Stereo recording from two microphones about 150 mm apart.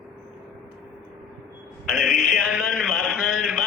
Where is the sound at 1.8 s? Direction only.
Centre (ahead or behind).